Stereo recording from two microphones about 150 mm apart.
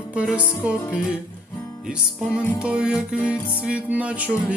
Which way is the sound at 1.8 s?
5° right (ahead or behind).